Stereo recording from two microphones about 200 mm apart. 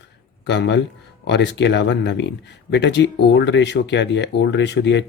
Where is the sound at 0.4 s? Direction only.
60° left (ahead or behind).